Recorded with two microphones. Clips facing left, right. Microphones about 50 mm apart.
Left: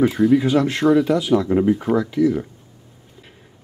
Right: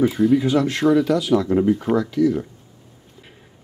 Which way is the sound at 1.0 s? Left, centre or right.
Centre.